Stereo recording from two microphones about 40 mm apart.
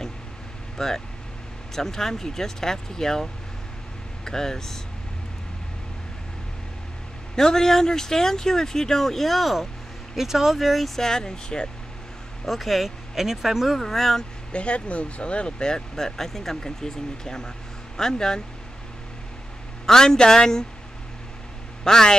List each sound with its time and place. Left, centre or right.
0.7 s speech: centre
7.3 s speech: centre
11.0 s speech: centre
12.4 s speech: centre
13.7 s speech: centre
14.5 s speech: left
19.9 s speech: centre
21.8 s speech: centre